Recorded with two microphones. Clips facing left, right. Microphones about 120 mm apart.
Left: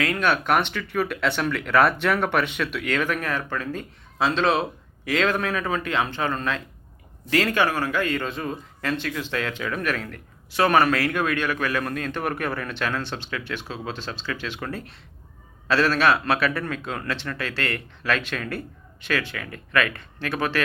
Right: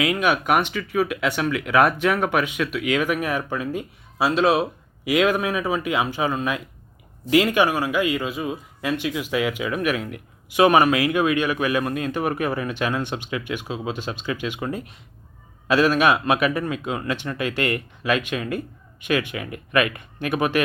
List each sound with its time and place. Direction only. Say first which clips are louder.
0.0 s speech: right 2 dB; 10° right (ahead or behind)